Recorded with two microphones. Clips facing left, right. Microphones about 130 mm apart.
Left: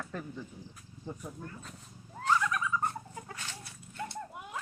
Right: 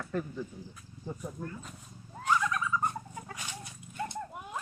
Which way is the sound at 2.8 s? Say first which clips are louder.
Right 1 dB; 15° right (ahead or behind).